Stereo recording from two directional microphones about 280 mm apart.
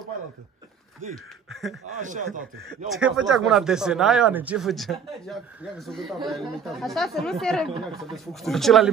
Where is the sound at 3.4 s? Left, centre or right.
Centre.